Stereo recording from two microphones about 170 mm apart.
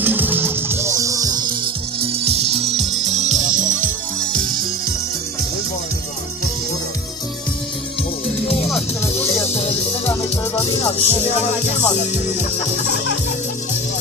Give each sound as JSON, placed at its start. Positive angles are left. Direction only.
{"t": 0.0, "sound": "music", "side_deg": -10}
{"t": 9.5, "sound": "music", "side_deg": 40}
{"t": 10.8, "sound": "music", "side_deg": 40}